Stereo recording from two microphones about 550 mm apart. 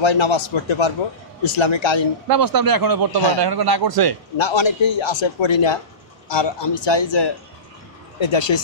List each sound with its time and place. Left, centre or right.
0.0 s a man's voice: left
2.2 s a man's voice: right
4.4 s a man's voice: left